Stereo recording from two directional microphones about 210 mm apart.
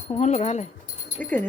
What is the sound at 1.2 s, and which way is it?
Speech, 10° left (ahead or behind).